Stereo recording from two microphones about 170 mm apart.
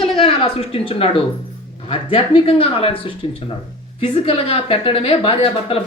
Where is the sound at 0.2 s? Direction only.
35° left (ahead or behind).